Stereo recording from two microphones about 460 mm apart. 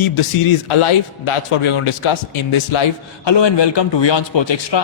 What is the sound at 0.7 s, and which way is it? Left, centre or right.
A man's voice, left.